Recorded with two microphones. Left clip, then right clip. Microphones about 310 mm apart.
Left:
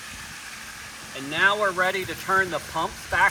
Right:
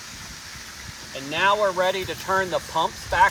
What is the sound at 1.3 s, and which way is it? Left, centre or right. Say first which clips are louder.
Speech: right 1 dB; right.